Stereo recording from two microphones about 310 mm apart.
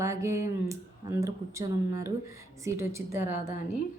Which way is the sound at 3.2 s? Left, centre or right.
Left.